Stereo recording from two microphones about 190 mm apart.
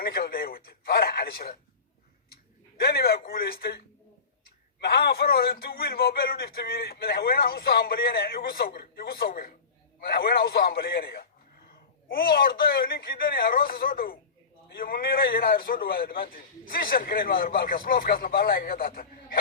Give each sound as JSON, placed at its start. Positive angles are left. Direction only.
{"t": 0.0, "sound": "speech", "side_deg": 55}
{"t": 2.7, "sound": "a man's voice", "side_deg": 55}